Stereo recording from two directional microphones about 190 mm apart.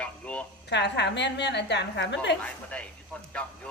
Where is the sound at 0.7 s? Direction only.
65° left (ahead or behind).